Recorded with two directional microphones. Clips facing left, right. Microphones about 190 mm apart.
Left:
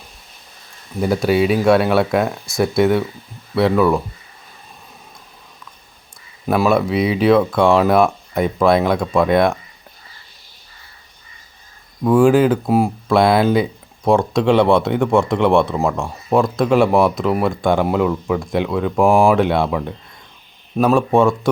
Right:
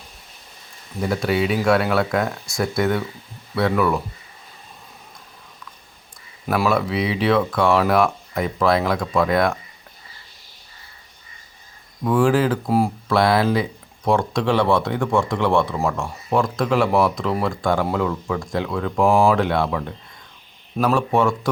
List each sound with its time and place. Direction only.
1.0 s speech: 30° left (ahead or behind)
6.4 s speech: 25° left (ahead or behind)
12.0 s speech: 25° left (ahead or behind)